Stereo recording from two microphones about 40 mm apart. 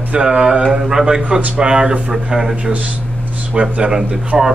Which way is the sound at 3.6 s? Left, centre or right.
Right.